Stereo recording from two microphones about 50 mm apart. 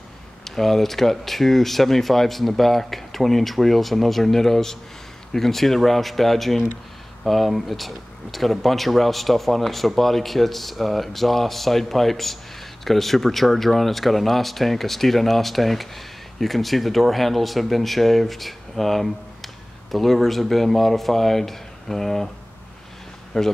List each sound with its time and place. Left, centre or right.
0.5 s speech: centre
23.3 s speech: centre